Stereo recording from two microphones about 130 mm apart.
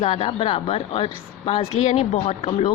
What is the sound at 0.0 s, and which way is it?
A woman's voice, 50° left (ahead or behind).